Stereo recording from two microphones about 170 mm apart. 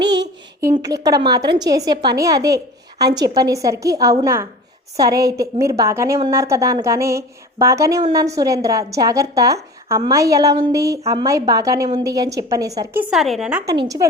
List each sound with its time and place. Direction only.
0.0 s a child's voice: 25° right (ahead or behind); by 13.7 s 5° right (ahead or behind)
13.7 s a woman's voice: 20° right (ahead or behind)